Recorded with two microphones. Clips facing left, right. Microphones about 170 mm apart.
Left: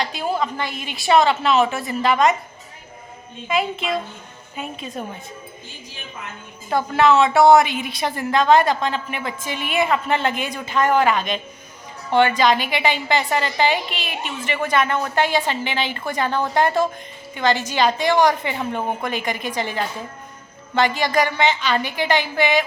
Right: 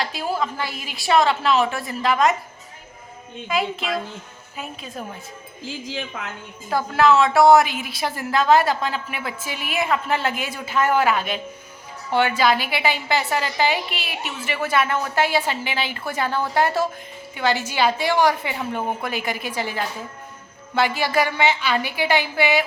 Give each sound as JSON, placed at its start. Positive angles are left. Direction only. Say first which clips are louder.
{"t": 0.0, "sound": "a woman's voice", "louder": "left 2 dB", "side_deg": 0}
{"t": 3.5, "sound": "a woman's voice", "louder": "left 2 dB", "side_deg": 0}
{"t": 5.6, "sound": "speech", "louder": "right 9 dB", "side_deg": -90}
{"t": 6.7, "sound": "a woman's voice", "louder": "left 1 dB", "side_deg": 0}